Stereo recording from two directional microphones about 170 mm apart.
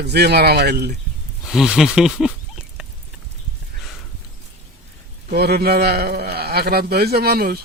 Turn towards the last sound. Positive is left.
turn(degrees=-65)  # may be behind; listen again after turning